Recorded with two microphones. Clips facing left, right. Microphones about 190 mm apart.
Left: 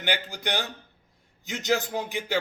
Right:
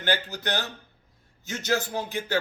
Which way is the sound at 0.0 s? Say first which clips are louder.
Right 2 dB; 15° left (ahead or behind).